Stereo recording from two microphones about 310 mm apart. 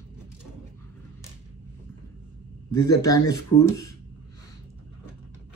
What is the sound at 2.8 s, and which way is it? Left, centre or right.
Speech, centre.